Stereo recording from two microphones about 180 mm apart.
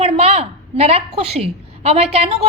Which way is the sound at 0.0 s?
35° right (ahead or behind).